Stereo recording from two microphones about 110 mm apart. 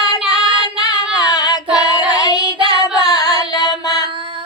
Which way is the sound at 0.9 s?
35° left (ahead or behind).